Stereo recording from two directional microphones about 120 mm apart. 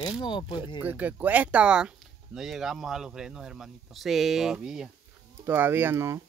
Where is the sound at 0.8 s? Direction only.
15° right (ahead or behind).